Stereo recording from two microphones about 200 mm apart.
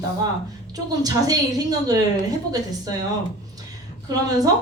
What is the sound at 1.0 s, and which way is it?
Speech, 20° right (ahead or behind).